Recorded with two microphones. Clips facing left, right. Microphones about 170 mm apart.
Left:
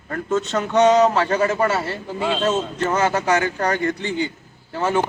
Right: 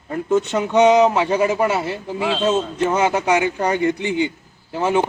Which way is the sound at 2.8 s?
15° right (ahead or behind).